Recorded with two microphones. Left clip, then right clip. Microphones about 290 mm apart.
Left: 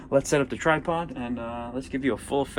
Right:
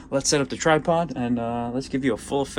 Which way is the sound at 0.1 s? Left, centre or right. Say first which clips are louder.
Even; centre.